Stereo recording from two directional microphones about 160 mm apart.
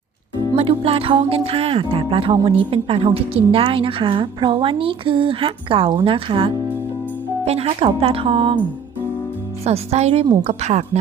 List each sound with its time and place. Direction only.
0.5 s speech: 35° right (ahead or behind)
9.6 s a woman's voice: 40° right (ahead or behind)